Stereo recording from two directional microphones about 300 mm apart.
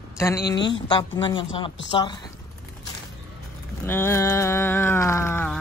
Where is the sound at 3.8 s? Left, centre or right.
Centre.